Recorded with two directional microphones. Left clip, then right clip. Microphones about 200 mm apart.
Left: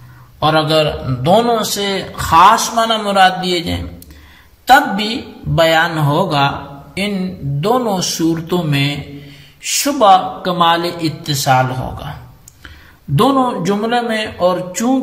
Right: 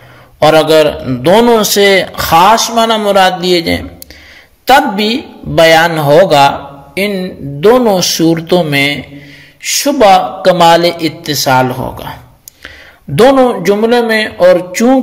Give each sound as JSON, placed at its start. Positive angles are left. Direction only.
{"t": 0.4, "sound": "a woman's voice", "side_deg": -45}